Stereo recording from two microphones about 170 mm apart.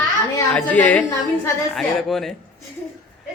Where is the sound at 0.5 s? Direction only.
10° left (ahead or behind).